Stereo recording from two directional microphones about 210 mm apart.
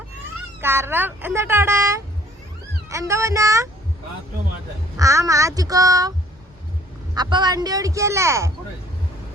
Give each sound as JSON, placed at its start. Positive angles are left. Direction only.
{"t": 0.6, "sound": "speech", "side_deg": -10}
{"t": 4.9, "sound": "speech", "side_deg": -15}